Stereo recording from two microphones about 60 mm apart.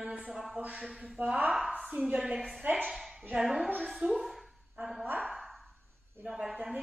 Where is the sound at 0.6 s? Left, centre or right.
Right.